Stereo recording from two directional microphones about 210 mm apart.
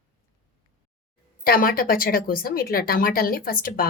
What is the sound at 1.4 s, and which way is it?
A woman's voice, 45° left (ahead or behind).